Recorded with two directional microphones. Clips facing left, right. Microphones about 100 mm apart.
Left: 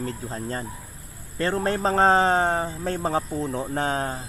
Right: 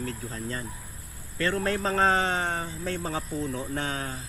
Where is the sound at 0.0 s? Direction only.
35° left (ahead or behind).